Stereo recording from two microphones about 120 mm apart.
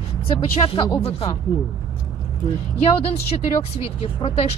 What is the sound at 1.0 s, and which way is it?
Speech, 60° left (ahead or behind).